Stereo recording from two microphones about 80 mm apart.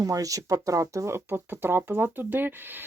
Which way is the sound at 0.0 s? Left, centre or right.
Right.